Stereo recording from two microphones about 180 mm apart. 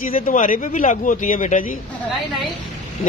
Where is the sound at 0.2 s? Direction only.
50° left (ahead or behind).